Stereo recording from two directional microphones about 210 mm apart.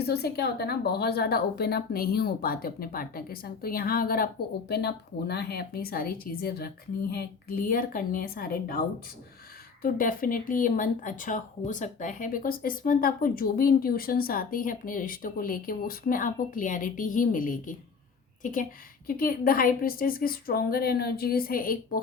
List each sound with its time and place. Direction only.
0.0 s a woman's voice: 50° left (ahead or behind)
9.8 s speech: 40° left (ahead or behind)
19.0 s a woman's voice: 45° left (ahead or behind)